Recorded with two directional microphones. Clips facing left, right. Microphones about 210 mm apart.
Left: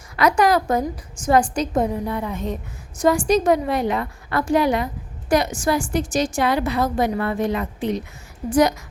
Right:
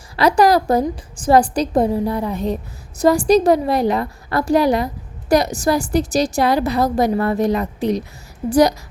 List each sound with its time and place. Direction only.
0.2 s a woman's voice: 35° right (ahead or behind)